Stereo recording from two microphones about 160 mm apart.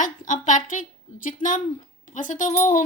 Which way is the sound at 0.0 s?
55° left (ahead or behind).